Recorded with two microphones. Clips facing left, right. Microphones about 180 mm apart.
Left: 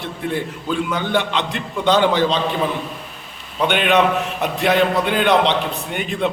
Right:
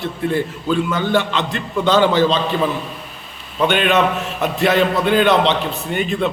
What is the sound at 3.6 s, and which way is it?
A man's voice, 15° left (ahead or behind).